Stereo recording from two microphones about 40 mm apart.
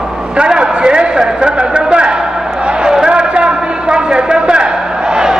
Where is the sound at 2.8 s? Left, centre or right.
Right.